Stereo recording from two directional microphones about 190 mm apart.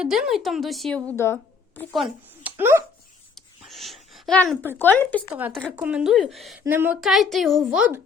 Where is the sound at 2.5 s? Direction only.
10° right (ahead or behind).